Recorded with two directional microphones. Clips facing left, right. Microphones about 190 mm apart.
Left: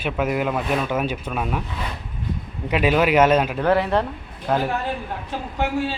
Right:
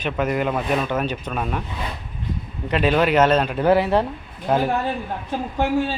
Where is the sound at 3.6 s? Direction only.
5° right (ahead or behind).